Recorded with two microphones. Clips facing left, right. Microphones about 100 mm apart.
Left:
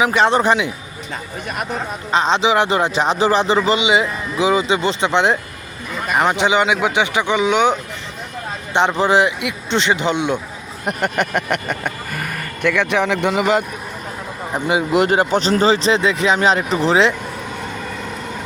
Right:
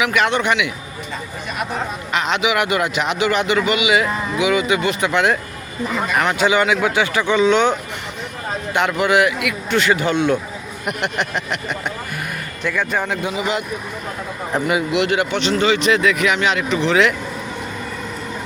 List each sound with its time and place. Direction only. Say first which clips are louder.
0.0 s speech: left 3 dB; 30° left (ahead or behind)
2.1 s a man's voice: left 4 dB; 30° left (ahead or behind); by 7.8 s 15° left (ahead or behind)
8.7 s a man's voice: left 2 dB; 25° left (ahead or behind)
10.8 s speech: left 3 dB; 45° left (ahead or behind)
12.6 s a man's voice: left 4 dB; 80° left; by 13.7 s 50° left (ahead or behind)
14.9 s speech: left 3 dB; 40° left (ahead or behind)